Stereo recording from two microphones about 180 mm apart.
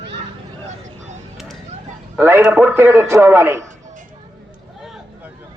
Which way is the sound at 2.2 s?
15° right (ahead or behind).